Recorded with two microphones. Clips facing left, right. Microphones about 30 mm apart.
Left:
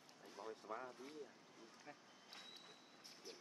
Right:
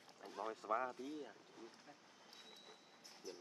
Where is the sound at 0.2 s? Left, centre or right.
Right.